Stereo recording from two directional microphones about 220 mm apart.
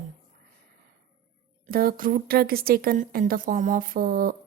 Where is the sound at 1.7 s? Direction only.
40° right (ahead or behind).